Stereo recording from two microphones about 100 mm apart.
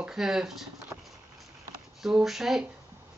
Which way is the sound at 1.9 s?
5° right (ahead or behind).